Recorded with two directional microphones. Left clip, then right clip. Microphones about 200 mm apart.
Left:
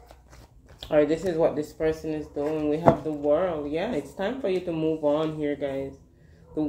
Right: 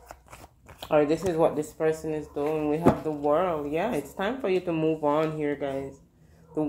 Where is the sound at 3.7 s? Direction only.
25° right (ahead or behind).